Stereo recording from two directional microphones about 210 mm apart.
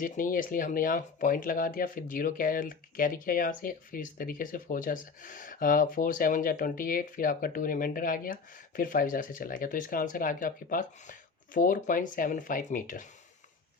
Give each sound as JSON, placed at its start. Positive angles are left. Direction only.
{"t": 0.0, "sound": "speech", "side_deg": 40}